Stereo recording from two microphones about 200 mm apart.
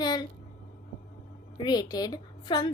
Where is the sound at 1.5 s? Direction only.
20° left (ahead or behind).